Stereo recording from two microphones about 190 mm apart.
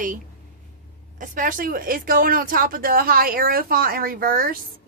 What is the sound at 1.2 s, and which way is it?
Speech, 45° right (ahead or behind).